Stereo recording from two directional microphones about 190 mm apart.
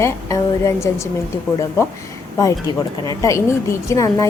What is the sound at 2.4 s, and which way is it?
A woman's voice, 20° left (ahead or behind).